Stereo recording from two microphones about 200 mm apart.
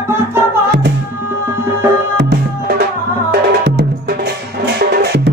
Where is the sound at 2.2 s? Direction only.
55° right (ahead or behind).